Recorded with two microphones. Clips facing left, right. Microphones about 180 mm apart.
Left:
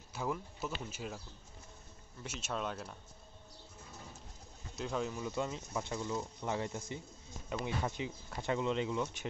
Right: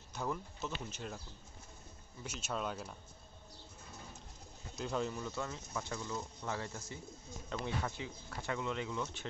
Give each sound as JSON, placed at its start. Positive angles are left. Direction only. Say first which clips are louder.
{"t": 0.1, "sound": "speech", "louder": "left 1 dB", "side_deg": 5}
{"t": 2.2, "sound": "speech", "louder": "left 1 dB", "side_deg": 0}
{"t": 4.7, "sound": "speech", "louder": "even", "side_deg": 0}
{"t": 5.2, "sound": "speech", "louder": "left 4 dB", "side_deg": 15}